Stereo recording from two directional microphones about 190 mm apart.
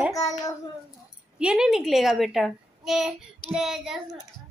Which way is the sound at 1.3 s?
5° right (ahead or behind).